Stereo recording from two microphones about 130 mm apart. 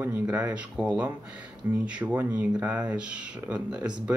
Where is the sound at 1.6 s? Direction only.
30° right (ahead or behind).